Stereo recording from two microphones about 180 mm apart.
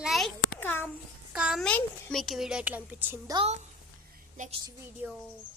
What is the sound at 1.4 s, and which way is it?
A child's voice, centre (ahead or behind).